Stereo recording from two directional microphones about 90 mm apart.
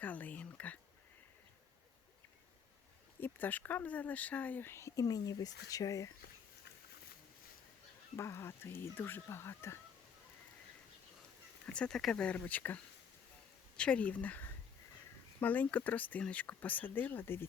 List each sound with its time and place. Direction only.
0.0 s speech: 20° left (ahead or behind)
3.2 s speech: 20° left (ahead or behind); by 6.1 s 40° left (ahead or behind)
8.1 s speech: 30° left (ahead or behind)
11.6 s speech: 10° left (ahead or behind)